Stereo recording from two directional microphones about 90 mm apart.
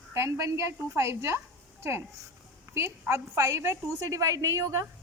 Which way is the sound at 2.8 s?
30° right (ahead or behind).